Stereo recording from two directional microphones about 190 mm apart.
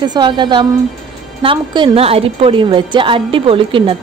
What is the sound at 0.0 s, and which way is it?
A woman's voice, 25° right (ahead or behind).